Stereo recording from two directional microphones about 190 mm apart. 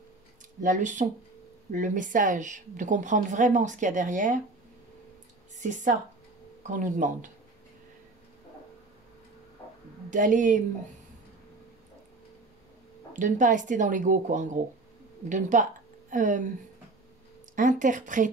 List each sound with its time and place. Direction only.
0.6 s a woman's voice: 40° right (ahead or behind)
5.6 s a woman's voice: 40° right (ahead or behind)
10.0 s speech: 40° right (ahead or behind)
13.1 s a woman's voice: 40° right (ahead or behind)
17.6 s speech: 45° right (ahead or behind)